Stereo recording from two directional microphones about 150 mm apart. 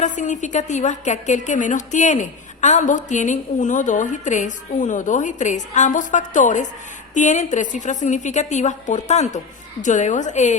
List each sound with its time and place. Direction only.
0.0 s a woman's voice: 55° left (ahead or behind)